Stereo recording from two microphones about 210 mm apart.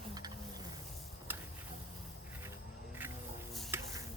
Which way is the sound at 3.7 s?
15° right (ahead or behind).